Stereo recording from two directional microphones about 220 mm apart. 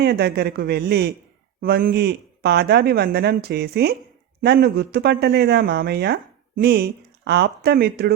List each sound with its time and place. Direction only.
0.0 s speech: 45° right (ahead or behind)